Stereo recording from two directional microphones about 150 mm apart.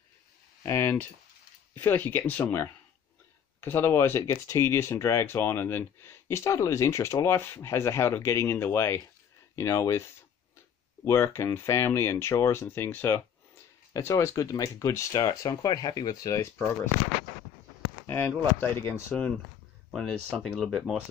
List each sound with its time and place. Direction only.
0.7 s speech: 15° left (ahead or behind)
11.1 s speech: 20° left (ahead or behind)
18.0 s speech: 15° left (ahead or behind)